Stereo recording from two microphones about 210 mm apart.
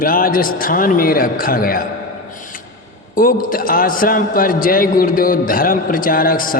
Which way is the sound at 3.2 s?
40° left (ahead or behind).